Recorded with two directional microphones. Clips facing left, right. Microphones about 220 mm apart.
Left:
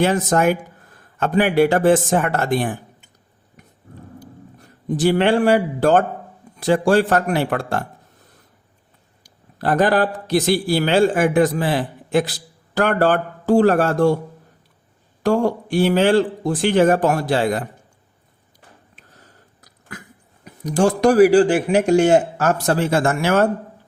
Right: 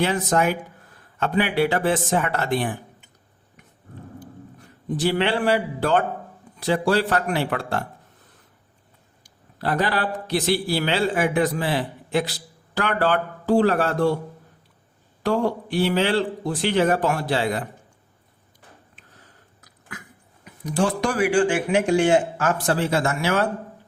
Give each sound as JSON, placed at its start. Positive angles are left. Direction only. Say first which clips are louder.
{"t": 0.0, "sound": "a man's voice", "louder": "left 4 dB", "side_deg": 45}
{"t": 4.9, "sound": "a man's voice", "louder": "left 6 dB", "side_deg": 45}
{"t": 9.2, "sound": "a man's voice", "louder": "left 4 dB", "side_deg": 45}
{"t": 15.2, "sound": "a man's voice", "louder": "left 4 dB", "side_deg": 45}
{"t": 20.4, "sound": "speech", "louder": "left 5 dB", "side_deg": 45}